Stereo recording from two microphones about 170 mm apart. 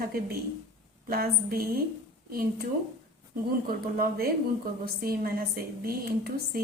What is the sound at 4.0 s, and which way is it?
A woman's voice, 65° right (ahead or behind).